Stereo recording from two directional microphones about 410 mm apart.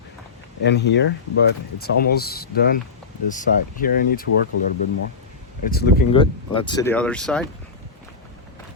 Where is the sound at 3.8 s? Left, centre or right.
Left.